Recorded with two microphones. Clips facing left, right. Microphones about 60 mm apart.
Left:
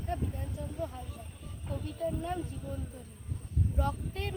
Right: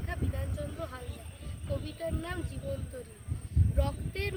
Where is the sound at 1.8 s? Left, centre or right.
Right.